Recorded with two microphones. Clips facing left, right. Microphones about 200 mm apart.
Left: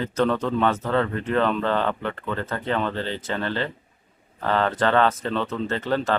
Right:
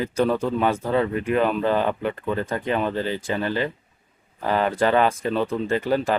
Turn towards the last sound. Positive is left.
turn(degrees=-10)  # may be behind; listen again after turning